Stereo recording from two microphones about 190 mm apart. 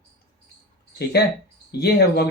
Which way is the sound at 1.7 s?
55° left (ahead or behind).